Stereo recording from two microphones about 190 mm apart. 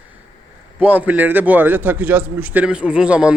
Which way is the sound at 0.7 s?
10° right (ahead or behind).